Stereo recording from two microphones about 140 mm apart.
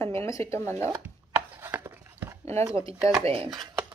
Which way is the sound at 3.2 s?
45° right (ahead or behind).